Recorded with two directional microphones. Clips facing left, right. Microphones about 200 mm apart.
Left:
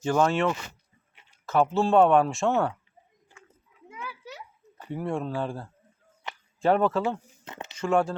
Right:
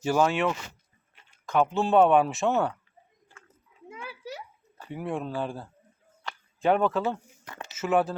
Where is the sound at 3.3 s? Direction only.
15° left (ahead or behind).